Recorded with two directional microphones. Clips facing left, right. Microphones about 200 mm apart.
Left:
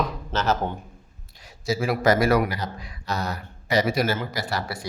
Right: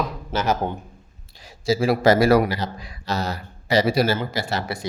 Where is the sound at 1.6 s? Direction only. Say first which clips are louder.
Right 4 dB; 30° right (ahead or behind).